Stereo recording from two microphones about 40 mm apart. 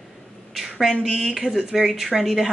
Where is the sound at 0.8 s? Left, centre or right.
Centre.